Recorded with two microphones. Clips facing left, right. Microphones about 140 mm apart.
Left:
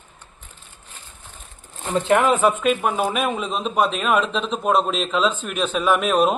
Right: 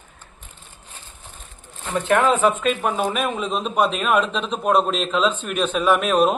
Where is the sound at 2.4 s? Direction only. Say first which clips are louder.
Left 1 dB; 5° left (ahead or behind).